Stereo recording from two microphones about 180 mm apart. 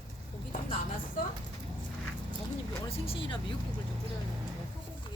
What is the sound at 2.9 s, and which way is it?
Vehicle, 30° left (ahead or behind).